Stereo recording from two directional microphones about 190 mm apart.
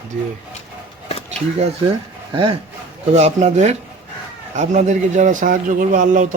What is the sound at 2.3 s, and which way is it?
Speech, 25° right (ahead or behind).